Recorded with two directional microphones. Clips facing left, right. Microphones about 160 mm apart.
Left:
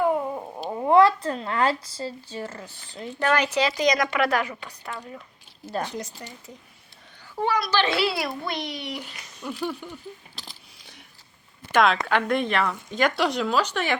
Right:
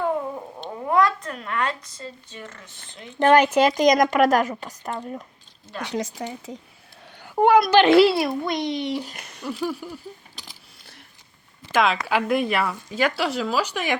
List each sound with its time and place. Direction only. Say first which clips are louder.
0.7 s speech: left 4 dB; 25° left (ahead or behind)
3.3 s a woman's voice: right 7 dB; 50° right (ahead or behind)
5.8 s speech: right 5 dB; 90° right
7.2 s a child's voice: right 9 dB; 55° right (ahead or behind)
8.1 s a child's voice: right 6 dB; 20° right (ahead or behind)
9.2 s a sound: right 2 dB; 75° right (ahead or behind)
9.5 s speech: right 3 dB; 5° right (ahead or behind)
11.7 s speech: even; centre (ahead or behind)